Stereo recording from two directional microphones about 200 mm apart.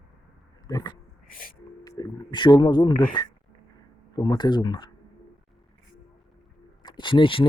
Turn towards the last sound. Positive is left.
turn(degrees=25)  # may be behind; listen again after turning